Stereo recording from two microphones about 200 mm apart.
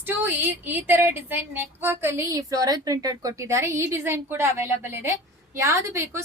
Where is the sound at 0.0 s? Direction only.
10° right (ahead or behind).